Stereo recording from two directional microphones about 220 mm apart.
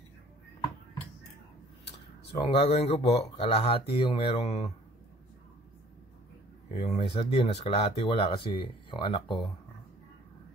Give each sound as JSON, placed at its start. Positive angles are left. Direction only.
{"t": 2.3, "sound": "speech", "side_deg": 25}
{"t": 6.7, "sound": "speech", "side_deg": 25}